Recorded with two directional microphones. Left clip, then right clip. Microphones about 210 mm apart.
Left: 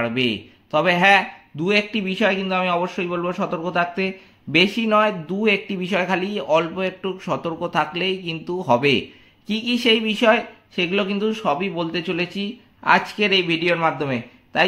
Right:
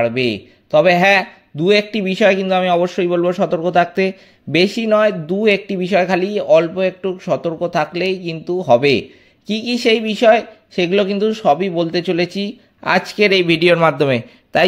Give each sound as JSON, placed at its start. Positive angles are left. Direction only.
{"t": 0.0, "sound": "a man's voice", "side_deg": -20}